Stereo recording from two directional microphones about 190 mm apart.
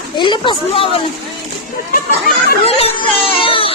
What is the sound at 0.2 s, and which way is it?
Speech, 25° left (ahead or behind).